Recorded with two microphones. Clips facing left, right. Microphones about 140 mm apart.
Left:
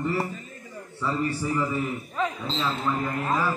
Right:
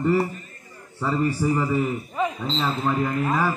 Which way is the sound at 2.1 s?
15° right (ahead or behind).